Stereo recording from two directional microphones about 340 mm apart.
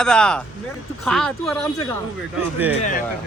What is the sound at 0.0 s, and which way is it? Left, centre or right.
Speech, centre.